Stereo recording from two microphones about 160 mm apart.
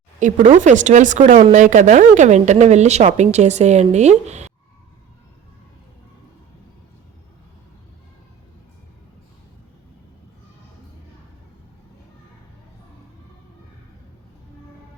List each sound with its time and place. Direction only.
0.2 s speech: 50° right (ahead or behind)